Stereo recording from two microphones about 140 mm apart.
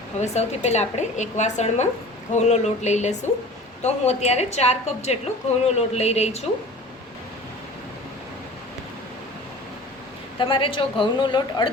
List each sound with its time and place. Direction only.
0.2 s speech: 55° left (ahead or behind)
10.3 s a woman's voice: 40° left (ahead or behind)